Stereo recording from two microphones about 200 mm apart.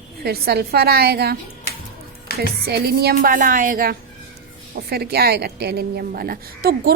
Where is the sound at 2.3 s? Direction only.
50° left (ahead or behind).